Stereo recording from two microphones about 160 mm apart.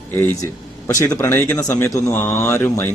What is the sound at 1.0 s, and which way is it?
A man's voice, 15° left (ahead or behind).